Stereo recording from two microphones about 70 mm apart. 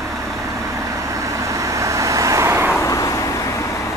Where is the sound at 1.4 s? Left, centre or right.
Right.